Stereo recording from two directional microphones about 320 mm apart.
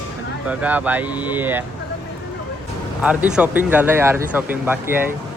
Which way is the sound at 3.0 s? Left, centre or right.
Centre.